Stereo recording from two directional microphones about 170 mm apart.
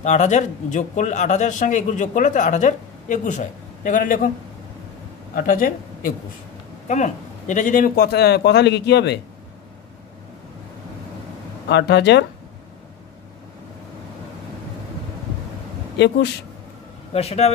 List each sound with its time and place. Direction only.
0.0 s speech: 45° left (ahead or behind)
5.3 s a man's voice: 55° left (ahead or behind); by 9.2 s 85° left
11.7 s speech: 85° left
17.1 s speech: 35° left (ahead or behind)